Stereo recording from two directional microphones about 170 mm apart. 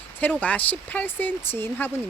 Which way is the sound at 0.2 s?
10° left (ahead or behind).